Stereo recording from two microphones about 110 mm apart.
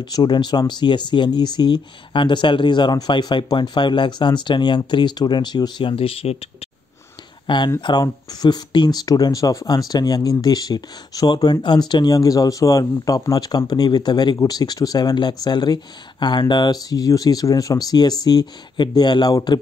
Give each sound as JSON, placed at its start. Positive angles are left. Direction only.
{"t": 0.0, "sound": "speech", "side_deg": 40}
{"t": 7.4, "sound": "speech", "side_deg": 45}